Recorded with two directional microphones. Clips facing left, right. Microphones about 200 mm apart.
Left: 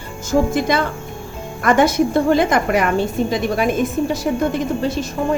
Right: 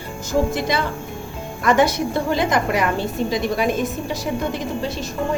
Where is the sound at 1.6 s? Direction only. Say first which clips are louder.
Left 3 dB; 50° left (ahead or behind).